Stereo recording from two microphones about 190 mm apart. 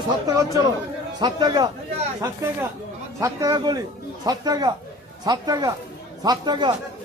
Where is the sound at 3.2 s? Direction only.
15° right (ahead or behind).